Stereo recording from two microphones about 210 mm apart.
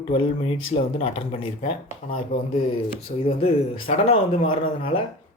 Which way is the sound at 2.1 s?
40° left (ahead or behind).